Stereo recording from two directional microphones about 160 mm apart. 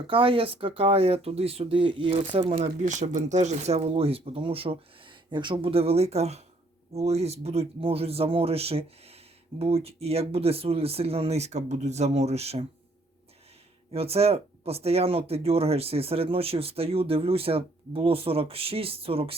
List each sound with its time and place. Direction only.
0.1 s speech: 35° right (ahead or behind)
13.9 s speech: 40° right (ahead or behind)